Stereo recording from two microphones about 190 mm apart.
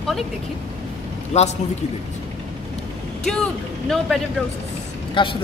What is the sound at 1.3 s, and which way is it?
Speech, 35° left (ahead or behind).